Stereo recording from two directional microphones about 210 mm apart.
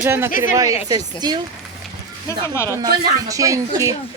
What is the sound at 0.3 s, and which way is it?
Speech, 40° left (ahead or behind).